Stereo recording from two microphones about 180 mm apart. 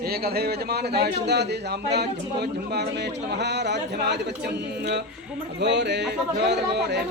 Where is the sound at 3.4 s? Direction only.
70° right (ahead or behind).